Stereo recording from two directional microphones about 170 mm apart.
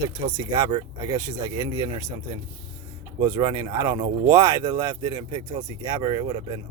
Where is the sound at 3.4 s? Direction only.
25° right (ahead or behind).